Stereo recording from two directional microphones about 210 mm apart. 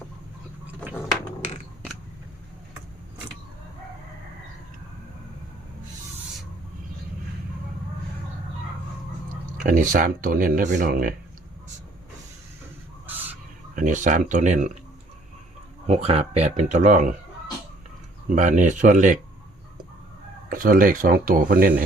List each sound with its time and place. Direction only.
9.6 s speech: 40° right (ahead or behind)
13.1 s bird: 10° right (ahead or behind)
13.7 s speech: 40° right (ahead or behind)
15.9 s speech: 30° right (ahead or behind)
18.3 s speech: 35° right (ahead or behind)
20.5 s speech: 40° right (ahead or behind)